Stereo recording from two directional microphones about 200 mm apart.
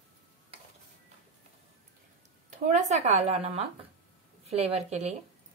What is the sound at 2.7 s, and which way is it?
A woman's voice, 35° right (ahead or behind).